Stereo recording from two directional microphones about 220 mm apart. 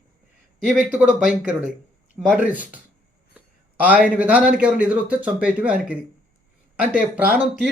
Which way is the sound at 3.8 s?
5° right (ahead or behind).